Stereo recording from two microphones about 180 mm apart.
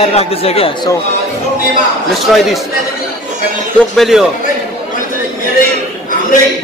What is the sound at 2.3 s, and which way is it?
Speech, centre (ahead or behind).